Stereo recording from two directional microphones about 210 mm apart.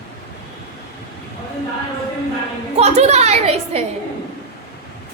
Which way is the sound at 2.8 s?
30° right (ahead or behind).